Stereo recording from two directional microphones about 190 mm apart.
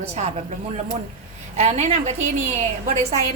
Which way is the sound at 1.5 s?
35° right (ahead or behind).